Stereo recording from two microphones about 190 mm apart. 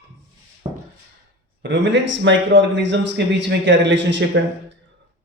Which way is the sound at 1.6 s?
70° right (ahead or behind).